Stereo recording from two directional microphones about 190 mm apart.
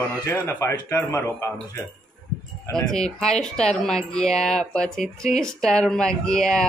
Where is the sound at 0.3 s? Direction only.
15° left (ahead or behind).